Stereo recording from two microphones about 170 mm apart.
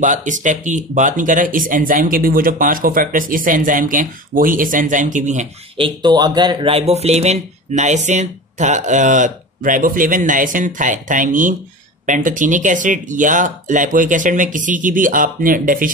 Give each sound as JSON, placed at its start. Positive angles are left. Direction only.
{"t": 0.0, "sound": "speech", "side_deg": -50}
{"t": 5.8, "sound": "speech", "side_deg": -30}